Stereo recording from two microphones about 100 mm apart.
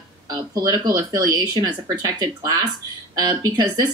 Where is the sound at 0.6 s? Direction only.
45° right (ahead or behind).